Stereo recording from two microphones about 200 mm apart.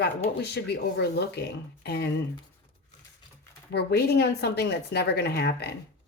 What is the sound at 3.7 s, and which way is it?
Speech, 55° left (ahead or behind).